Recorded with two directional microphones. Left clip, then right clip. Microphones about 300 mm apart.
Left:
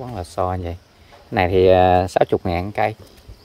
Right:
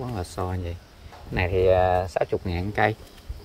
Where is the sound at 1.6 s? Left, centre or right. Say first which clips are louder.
Left 6 dB; left.